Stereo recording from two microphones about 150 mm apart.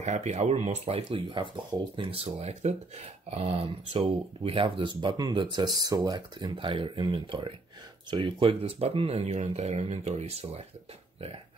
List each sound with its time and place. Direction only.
0.0 s speech: 50° right (ahead or behind)